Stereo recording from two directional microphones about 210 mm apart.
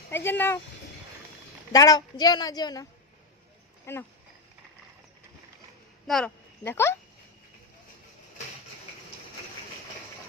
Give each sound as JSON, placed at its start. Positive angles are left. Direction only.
{"t": 0.1, "sound": "speech", "side_deg": 10}
{"t": 1.7, "sound": "a woman's voice", "side_deg": 15}
{"t": 3.9, "sound": "speech", "side_deg": 10}
{"t": 6.1, "sound": "speech", "side_deg": 5}